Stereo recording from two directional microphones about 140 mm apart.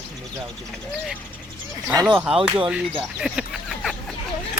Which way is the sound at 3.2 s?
5° right (ahead or behind).